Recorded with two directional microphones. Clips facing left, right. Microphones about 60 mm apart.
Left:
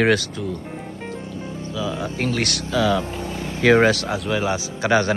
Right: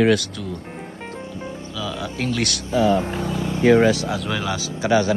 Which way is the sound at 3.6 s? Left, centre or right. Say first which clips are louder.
Even; left.